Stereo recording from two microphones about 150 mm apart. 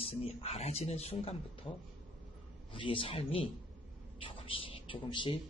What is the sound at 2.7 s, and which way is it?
Speech, 35° left (ahead or behind).